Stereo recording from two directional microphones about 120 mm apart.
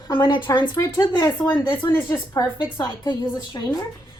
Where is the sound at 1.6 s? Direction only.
40° left (ahead or behind).